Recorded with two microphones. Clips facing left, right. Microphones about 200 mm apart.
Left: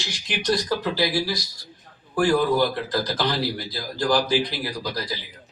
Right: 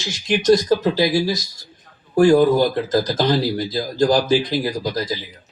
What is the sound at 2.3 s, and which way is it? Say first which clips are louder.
Speech: right 6 dB; 45° right (ahead or behind).